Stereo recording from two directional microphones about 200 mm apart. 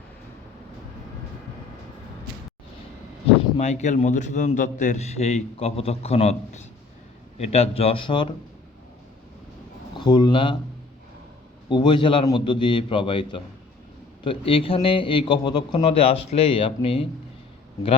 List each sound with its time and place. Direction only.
3.2 s a man's voice: 35° left (ahead or behind)
10.0 s a man's voice: 20° left (ahead or behind)
11.7 s a man's voice: 20° left (ahead or behind)